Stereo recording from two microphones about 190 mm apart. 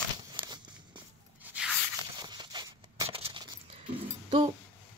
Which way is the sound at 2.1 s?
20° right (ahead or behind).